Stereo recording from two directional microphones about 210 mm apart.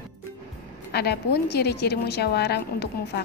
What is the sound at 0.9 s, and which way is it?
A woman's voice, 50° left (ahead or behind).